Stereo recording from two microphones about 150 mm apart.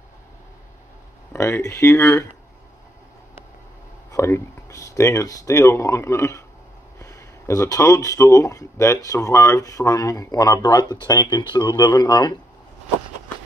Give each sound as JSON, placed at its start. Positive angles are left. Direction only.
{"t": 1.3, "sound": "speech", "side_deg": 20}
{"t": 4.1, "sound": "speech", "side_deg": 20}